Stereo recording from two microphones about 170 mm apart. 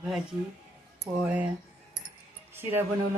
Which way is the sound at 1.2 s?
5° right (ahead or behind).